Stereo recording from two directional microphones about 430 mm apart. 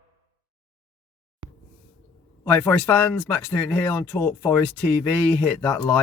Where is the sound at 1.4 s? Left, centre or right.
Right.